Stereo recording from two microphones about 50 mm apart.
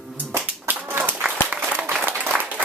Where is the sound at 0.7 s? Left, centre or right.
Right.